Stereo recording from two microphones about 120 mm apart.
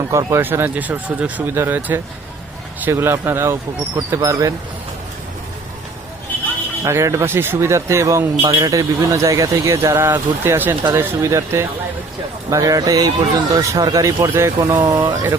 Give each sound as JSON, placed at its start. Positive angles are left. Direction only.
{"t": 0.1, "sound": "speech", "side_deg": -25}
{"t": 6.8, "sound": "speech", "side_deg": -25}
{"t": 14.3, "sound": "speech", "side_deg": -20}